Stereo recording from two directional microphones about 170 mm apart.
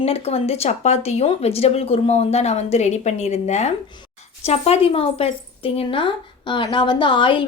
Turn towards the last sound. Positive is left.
turn(degrees=30)  # may be behind; listen again after turning